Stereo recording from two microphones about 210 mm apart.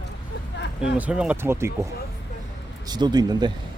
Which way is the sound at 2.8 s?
20° right (ahead or behind).